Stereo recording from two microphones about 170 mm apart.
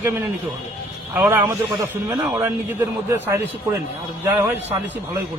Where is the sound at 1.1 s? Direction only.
15° right (ahead or behind).